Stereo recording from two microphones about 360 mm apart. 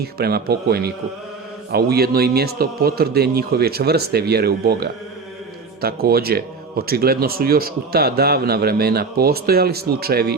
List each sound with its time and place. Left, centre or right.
0.0 s speech: right